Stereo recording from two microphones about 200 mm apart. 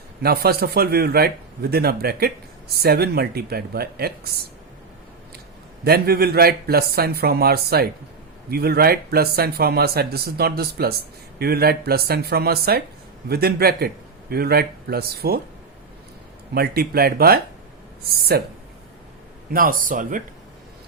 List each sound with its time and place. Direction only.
0.2 s speech: 50° right (ahead or behind)
5.8 s speech: 50° right (ahead or behind)
16.6 s speech: 50° right (ahead or behind)